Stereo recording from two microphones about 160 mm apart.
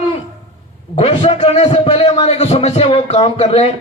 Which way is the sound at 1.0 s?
40° left (ahead or behind).